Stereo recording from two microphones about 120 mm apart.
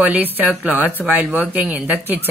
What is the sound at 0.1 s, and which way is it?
Speech, 15° right (ahead or behind).